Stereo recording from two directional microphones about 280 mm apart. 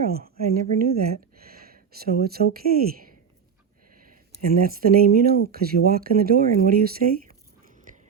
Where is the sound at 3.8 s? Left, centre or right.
Right.